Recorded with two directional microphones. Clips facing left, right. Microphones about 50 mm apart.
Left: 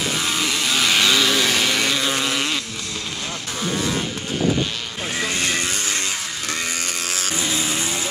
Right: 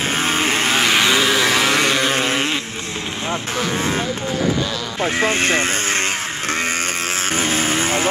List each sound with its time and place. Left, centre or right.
0.1 s vehicle: right
5.0 s speech: right
7.3 s vehicle: right